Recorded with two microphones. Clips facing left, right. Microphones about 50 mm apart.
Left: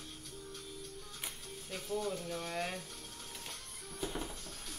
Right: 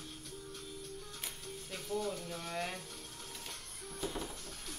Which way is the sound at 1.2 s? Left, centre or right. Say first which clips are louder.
Right 1 dB; centre.